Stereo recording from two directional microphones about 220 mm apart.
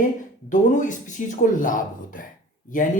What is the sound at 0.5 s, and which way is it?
Speech, 35° left (ahead or behind).